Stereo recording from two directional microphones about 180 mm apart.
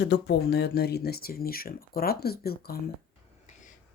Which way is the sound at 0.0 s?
65° left (ahead or behind).